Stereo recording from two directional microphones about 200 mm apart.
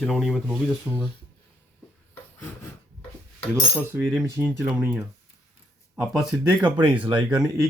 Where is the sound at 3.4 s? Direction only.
5° left (ahead or behind).